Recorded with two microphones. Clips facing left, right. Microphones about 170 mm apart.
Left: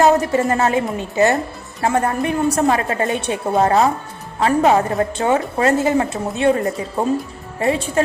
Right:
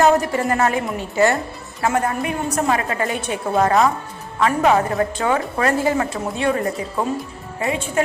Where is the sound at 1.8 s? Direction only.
30° left (ahead or behind).